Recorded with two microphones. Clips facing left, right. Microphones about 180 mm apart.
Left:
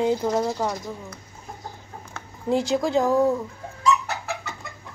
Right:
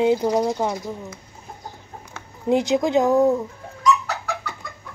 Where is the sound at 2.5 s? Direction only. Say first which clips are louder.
Right 3 dB; 20° right (ahead or behind).